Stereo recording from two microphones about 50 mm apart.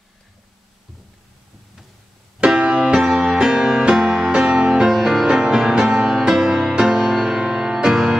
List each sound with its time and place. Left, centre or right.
2.4 s music: right